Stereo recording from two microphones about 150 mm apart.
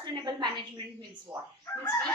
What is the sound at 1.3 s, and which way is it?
Chicken, 10° right (ahead or behind).